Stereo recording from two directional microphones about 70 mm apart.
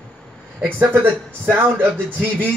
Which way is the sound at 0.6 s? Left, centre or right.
Right.